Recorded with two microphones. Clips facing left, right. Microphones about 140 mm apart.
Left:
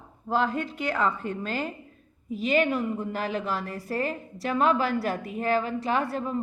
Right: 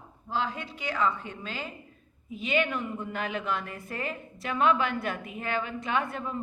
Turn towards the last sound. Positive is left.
turn(degrees=35)  # may be behind; listen again after turning